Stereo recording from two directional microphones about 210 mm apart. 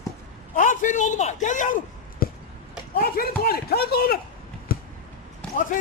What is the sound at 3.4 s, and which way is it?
Speech, 45° left (ahead or behind).